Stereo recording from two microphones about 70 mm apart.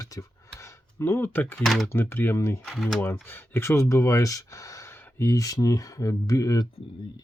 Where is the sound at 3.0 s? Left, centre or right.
Left.